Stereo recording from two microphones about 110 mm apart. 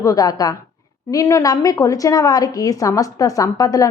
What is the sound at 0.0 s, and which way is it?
A woman's voice, 30° left (ahead or behind).